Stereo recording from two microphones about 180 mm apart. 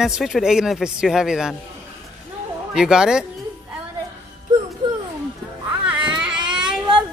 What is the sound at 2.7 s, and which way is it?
Speech, 5° right (ahead or behind).